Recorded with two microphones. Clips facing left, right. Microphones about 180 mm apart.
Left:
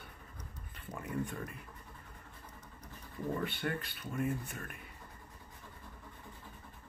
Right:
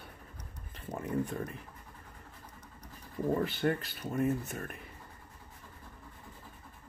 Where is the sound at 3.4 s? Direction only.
40° right (ahead or behind).